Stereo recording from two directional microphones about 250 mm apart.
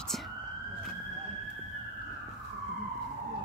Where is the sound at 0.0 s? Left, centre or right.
Centre.